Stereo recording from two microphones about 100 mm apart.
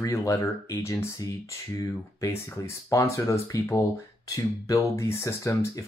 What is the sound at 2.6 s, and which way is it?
Speech, 30° left (ahead or behind).